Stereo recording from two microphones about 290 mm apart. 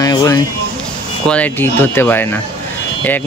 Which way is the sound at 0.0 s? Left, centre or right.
Centre.